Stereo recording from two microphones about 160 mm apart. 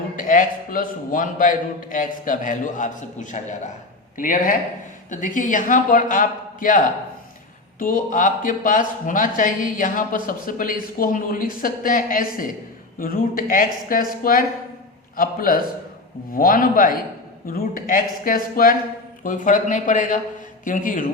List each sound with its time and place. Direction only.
0.2 s a man's voice: 55° left (ahead or behind)